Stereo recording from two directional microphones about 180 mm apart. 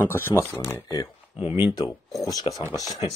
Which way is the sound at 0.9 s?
25° left (ahead or behind).